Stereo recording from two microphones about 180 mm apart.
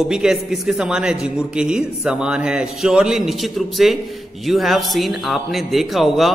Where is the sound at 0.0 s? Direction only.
5° right (ahead or behind).